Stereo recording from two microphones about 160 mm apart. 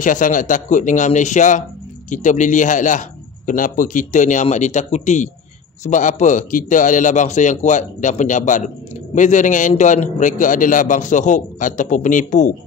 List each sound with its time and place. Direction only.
0.0 s a man's voice: 55° left (ahead or behind)